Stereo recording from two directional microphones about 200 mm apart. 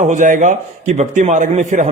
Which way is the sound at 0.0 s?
35° right (ahead or behind).